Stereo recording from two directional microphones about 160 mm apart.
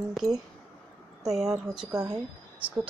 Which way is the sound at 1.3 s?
Centre (ahead or behind).